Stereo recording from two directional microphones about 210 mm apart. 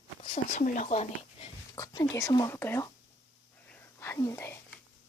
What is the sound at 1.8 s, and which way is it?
Speech, 15° left (ahead or behind).